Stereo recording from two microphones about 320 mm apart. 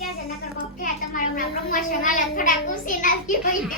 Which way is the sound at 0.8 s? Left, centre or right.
Left.